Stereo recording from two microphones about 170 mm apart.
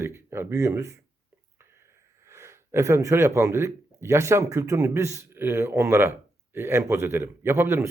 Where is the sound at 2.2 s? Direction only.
15° right (ahead or behind).